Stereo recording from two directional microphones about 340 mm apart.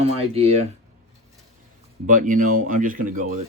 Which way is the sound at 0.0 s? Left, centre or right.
Centre.